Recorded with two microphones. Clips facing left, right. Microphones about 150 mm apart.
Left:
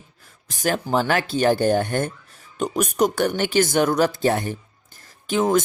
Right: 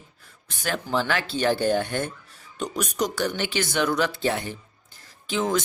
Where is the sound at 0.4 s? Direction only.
40° left (ahead or behind).